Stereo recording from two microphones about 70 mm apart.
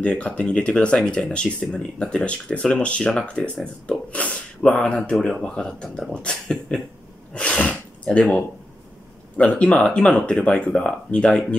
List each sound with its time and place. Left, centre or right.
0.0 s speech: centre